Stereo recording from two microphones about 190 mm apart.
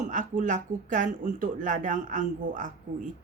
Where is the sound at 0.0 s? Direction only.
45° right (ahead or behind).